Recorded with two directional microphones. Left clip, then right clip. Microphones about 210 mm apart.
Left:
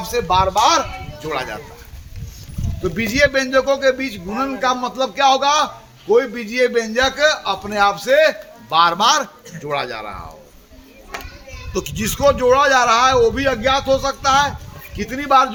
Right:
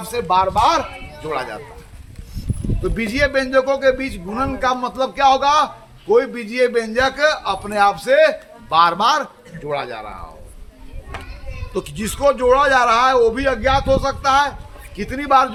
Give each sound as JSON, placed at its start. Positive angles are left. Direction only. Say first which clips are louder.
{"t": 0.0, "sound": "speech", "louder": "left 1 dB", "side_deg": -10}
{"t": 2.8, "sound": "a man's voice", "louder": "left 3 dB", "side_deg": 0}
{"t": 11.1, "sound": "children playing", "louder": "left 3 dB", "side_deg": 35}
{"t": 11.7, "sound": "a man's voice", "louder": "left 2 dB", "side_deg": 10}